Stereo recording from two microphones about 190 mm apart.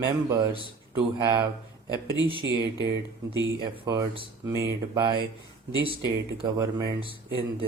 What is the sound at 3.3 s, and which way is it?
Speech, 20° right (ahead or behind).